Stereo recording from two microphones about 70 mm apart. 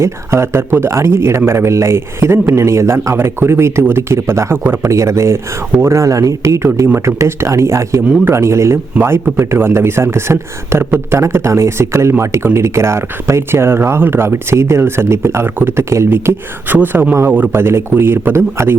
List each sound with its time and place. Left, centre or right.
0.0 s a man's voice: right
6.8 s a man's voice: right
16.1 s speech: right
17.5 s a man's voice: right